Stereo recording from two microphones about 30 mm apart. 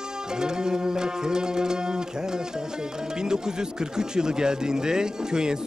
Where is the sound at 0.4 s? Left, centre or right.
Right.